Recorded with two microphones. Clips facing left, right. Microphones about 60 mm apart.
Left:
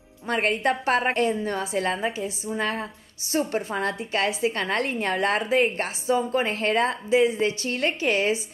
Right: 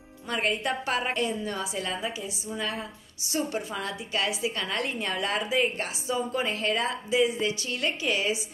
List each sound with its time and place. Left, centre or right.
0.3 s a woman's voice: left